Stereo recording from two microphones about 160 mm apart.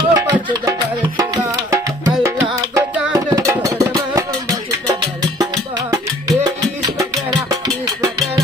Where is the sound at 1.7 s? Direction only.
15° right (ahead or behind).